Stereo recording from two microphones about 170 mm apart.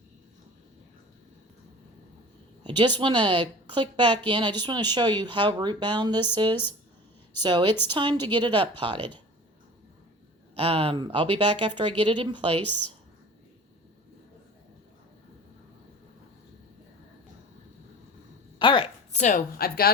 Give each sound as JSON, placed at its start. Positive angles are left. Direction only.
{"t": 2.6, "sound": "a woman's voice", "side_deg": -30}
{"t": 10.5, "sound": "a woman's voice", "side_deg": -35}
{"t": 18.6, "sound": "a woman's voice", "side_deg": 30}
{"t": 19.1, "sound": "a woman's voice", "side_deg": 45}
{"t": 19.5, "sound": "a woman's voice", "side_deg": 65}